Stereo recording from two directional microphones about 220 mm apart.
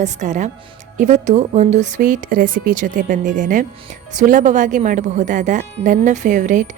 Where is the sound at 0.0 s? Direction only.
35° right (ahead or behind).